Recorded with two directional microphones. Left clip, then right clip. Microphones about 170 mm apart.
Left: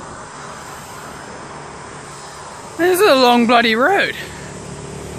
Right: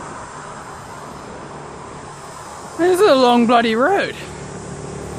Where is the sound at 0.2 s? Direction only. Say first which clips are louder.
Even; 50° right (ahead or behind).